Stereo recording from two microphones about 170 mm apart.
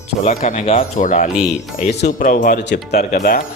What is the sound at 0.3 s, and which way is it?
Speech, 50° left (ahead or behind).